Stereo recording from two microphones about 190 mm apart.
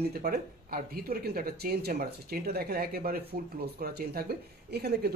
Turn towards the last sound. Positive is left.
turn(degrees=-55)  # may be behind; listen again after turning